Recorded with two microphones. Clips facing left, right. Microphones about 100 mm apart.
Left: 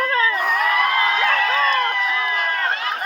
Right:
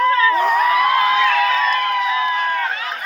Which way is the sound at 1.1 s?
40° left (ahead or behind).